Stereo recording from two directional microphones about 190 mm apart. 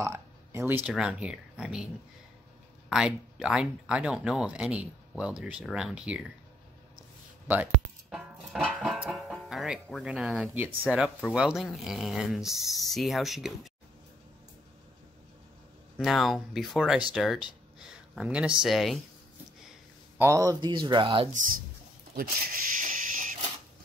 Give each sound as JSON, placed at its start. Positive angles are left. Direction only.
{"t": 0.0, "sound": "speech", "side_deg": -15}
{"t": 2.9, "sound": "speech", "side_deg": -5}
{"t": 7.4, "sound": "music", "side_deg": -10}
{"t": 8.5, "sound": "speech", "side_deg": 0}
{"t": 16.0, "sound": "speech", "side_deg": 0}
{"t": 20.2, "sound": "speech", "side_deg": -15}
{"t": 22.1, "sound": "speech", "side_deg": -50}